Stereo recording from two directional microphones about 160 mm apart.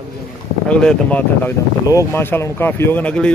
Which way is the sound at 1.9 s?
15° left (ahead or behind).